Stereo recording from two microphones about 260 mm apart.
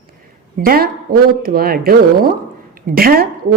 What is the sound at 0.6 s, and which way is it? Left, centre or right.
A woman's voice, right.